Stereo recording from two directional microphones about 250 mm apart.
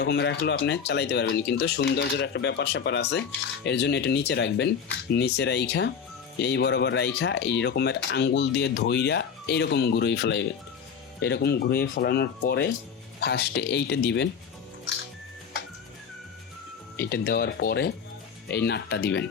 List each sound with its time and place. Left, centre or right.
0.0 s speech: left
17.0 s speech: left